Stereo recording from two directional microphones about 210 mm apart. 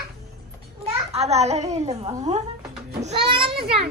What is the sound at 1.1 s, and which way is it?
A woman's voice, 30° right (ahead or behind).